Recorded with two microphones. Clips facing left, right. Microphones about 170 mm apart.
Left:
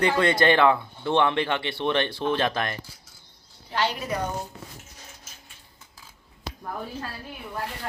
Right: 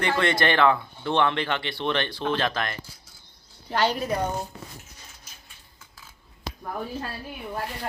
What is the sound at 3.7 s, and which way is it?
Speech, 45° right (ahead or behind).